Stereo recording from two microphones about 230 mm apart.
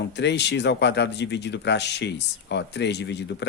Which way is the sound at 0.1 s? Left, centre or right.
Left.